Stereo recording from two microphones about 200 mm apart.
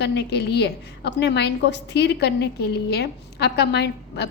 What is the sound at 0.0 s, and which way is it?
A woman's voice, 55° left (ahead or behind).